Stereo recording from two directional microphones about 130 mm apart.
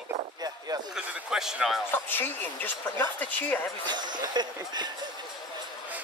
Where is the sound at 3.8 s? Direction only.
35° right (ahead or behind).